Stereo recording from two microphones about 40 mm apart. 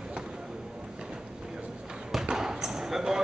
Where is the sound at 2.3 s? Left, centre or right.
Centre.